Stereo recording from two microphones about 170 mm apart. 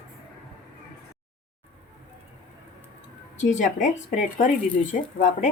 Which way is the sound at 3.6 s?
45° left (ahead or behind).